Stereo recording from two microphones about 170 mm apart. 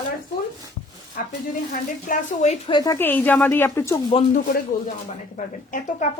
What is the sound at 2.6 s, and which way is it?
Speech, 25° left (ahead or behind).